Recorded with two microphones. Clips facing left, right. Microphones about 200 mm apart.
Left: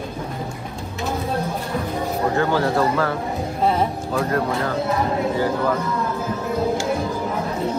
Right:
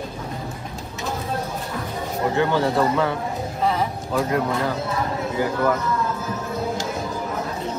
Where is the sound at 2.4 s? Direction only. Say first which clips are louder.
Right 1 dB; 20° right (ahead or behind).